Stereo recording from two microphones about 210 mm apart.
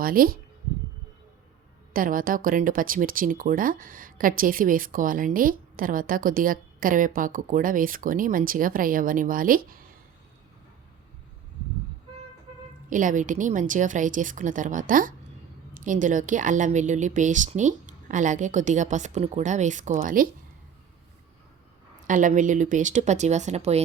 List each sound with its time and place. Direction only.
0.0 s speech: 45° right (ahead or behind)
1.9 s speech: 40° right (ahead or behind)
12.9 s speech: 40° right (ahead or behind)
22.0 s speech: 40° right (ahead or behind)